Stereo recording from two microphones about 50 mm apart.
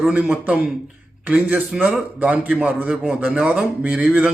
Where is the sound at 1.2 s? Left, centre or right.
Right.